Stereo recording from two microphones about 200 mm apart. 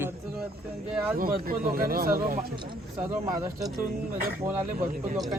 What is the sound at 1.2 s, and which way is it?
Speech, 45° right (ahead or behind).